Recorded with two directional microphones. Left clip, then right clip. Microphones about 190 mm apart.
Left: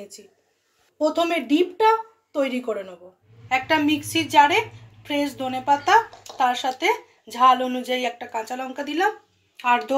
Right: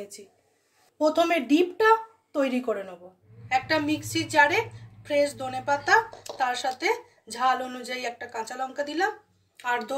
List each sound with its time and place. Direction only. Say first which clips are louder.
0.9 s speech: left 1 dB; 10° right (ahead or behind)
3.4 s a woman's voice: left 4 dB; 25° left (ahead or behind)